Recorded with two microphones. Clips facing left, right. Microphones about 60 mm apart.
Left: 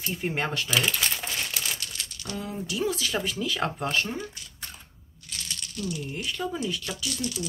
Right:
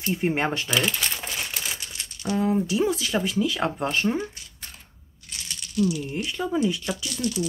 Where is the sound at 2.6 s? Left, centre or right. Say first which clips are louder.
Right 5 dB; right.